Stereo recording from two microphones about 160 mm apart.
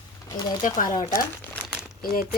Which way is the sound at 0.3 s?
20° left (ahead or behind).